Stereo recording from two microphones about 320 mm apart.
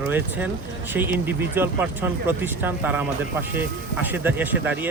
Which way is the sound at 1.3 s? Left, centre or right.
Centre.